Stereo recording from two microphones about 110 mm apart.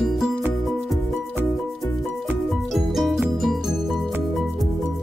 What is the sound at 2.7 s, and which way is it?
Music, centre (ahead or behind).